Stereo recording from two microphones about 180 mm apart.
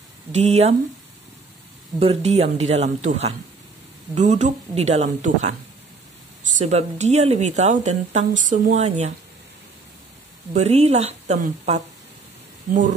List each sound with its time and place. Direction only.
0.3 s a woman's voice: 35° right (ahead or behind)
2.0 s a woman's voice: 35° right (ahead or behind)
10.5 s a woman's voice: 35° right (ahead or behind)